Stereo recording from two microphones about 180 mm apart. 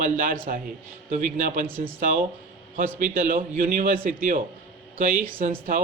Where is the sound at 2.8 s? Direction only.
50° right (ahead or behind).